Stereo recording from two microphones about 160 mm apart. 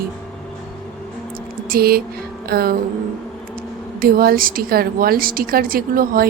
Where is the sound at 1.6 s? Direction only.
70° right (ahead or behind).